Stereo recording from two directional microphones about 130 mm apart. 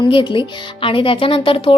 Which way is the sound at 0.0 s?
40° left (ahead or behind).